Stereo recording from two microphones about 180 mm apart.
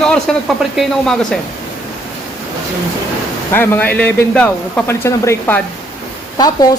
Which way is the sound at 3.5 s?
10° left (ahead or behind).